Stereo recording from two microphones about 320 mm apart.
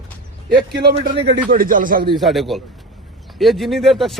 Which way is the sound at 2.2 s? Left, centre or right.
Centre.